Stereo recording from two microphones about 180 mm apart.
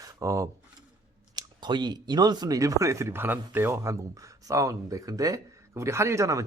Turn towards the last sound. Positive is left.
turn(degrees=-15)  # may be behind; listen again after turning